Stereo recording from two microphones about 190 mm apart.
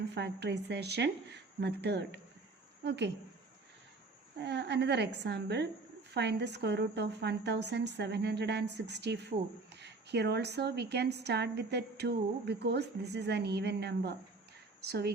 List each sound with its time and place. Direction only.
0.1 s a woman's voice: 60° right (ahead or behind)
4.4 s a woman's voice: 65° right (ahead or behind)